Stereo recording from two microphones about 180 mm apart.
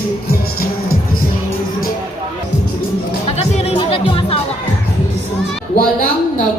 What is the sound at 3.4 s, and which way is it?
Music, 35° left (ahead or behind).